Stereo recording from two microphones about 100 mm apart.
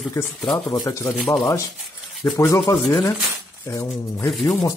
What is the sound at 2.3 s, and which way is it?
Speech, 35° left (ahead or behind).